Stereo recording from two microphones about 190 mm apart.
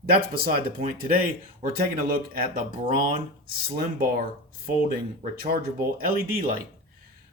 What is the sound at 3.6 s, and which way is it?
Speech, 50° right (ahead or behind).